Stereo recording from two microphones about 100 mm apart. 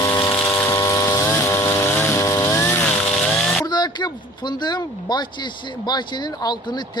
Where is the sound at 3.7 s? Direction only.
45° left (ahead or behind).